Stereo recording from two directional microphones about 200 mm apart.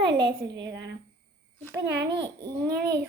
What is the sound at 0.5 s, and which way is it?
A child's voice, 60° right (ahead or behind).